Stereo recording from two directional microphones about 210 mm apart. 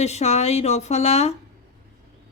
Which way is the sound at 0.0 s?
30° left (ahead or behind).